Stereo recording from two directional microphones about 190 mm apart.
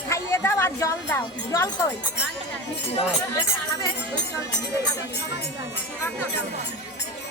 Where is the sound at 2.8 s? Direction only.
30° left (ahead or behind).